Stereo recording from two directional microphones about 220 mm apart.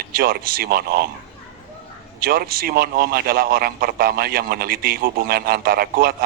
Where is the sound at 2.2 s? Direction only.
40° right (ahead or behind).